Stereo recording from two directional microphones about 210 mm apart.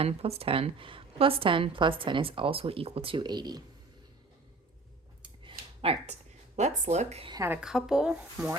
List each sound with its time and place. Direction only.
0.0 s a woman's voice: 30° right (ahead or behind)
5.2 s a sound: 25° right (ahead or behind)
6.6 s speech: 35° right (ahead or behind)
7.3 s speech: 10° right (ahead or behind)